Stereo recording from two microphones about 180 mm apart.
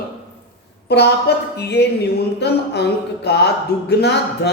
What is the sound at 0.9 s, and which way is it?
A man's voice, 65° left (ahead or behind).